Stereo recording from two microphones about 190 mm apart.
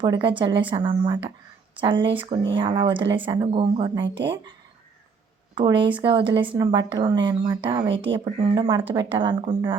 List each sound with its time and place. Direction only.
0.0 s a woman's voice: 25° right (ahead or behind)
4.0 s speech: 65° right (ahead or behind)
5.5 s a woman's voice: 25° right (ahead or behind)